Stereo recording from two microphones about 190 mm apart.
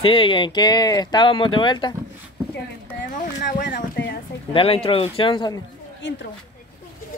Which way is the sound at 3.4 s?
55° left (ahead or behind).